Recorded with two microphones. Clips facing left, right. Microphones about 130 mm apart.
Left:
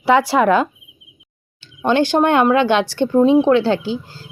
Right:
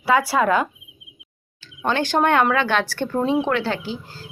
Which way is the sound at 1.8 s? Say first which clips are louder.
Left 5 dB; 20° left (ahead or behind).